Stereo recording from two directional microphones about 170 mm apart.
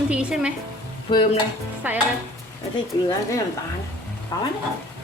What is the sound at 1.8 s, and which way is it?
Speech, 10° right (ahead or behind).